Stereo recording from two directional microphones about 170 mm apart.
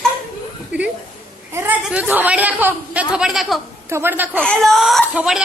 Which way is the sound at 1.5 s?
10° right (ahead or behind).